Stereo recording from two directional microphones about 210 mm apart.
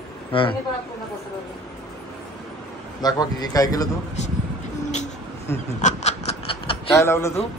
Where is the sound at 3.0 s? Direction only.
20° left (ahead or behind).